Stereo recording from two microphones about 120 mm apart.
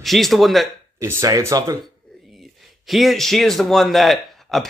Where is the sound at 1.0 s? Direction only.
25° right (ahead or behind).